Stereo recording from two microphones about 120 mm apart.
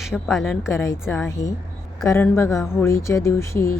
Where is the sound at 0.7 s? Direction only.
25° left (ahead or behind).